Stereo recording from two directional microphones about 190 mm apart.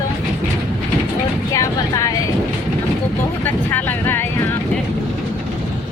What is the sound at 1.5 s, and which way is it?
Vehicle, 15° left (ahead or behind).